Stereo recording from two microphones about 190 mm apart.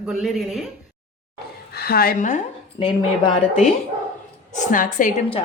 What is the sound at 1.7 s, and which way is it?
Speech, 55° left (ahead or behind).